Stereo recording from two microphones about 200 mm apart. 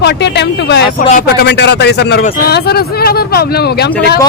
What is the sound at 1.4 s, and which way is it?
Speech, 60° left (ahead or behind).